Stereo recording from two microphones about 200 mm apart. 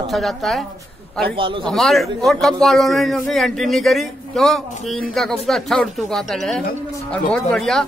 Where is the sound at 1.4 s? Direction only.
25° right (ahead or behind).